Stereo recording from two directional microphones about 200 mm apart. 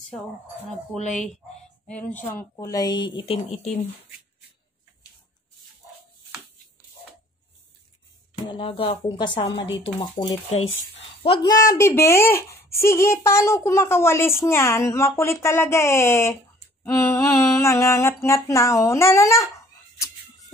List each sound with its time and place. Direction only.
1.9 s speech: 5° left (ahead or behind); by 3.8 s 30° left (ahead or behind)
8.5 s speech: 25° left (ahead or behind)
11.7 s a sound: 15° left (ahead or behind)